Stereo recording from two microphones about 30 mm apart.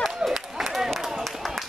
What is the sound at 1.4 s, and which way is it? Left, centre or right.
Run, centre.